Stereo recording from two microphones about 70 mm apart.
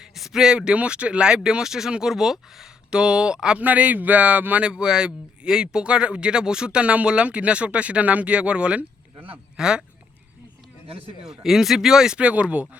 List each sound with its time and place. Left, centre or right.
0.0 s speech: centre
11.3 s speech: centre